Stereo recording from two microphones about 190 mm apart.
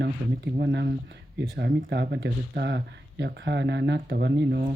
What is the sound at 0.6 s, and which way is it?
Speech, 65° right (ahead or behind).